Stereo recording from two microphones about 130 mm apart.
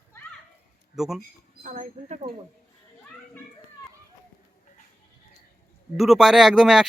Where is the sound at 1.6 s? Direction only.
75° right (ahead or behind).